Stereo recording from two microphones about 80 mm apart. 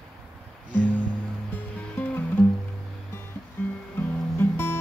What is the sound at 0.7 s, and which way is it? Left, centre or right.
Music, left.